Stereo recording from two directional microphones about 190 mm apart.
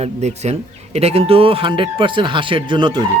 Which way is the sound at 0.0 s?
35° right (ahead or behind).